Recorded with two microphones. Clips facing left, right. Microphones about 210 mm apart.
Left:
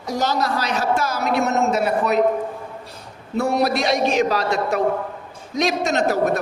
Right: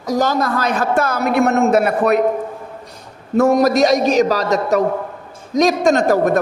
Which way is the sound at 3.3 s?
45° right (ahead or behind).